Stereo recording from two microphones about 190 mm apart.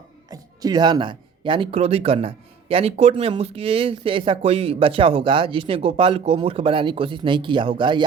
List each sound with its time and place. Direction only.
0.3 s speech: 20° right (ahead or behind)